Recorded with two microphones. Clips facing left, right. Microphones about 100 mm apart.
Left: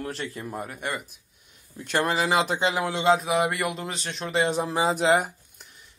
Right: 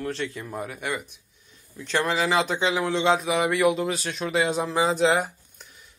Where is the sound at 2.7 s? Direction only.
10° left (ahead or behind).